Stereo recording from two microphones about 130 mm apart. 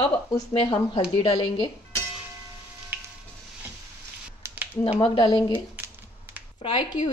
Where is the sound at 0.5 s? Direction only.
40° left (ahead or behind).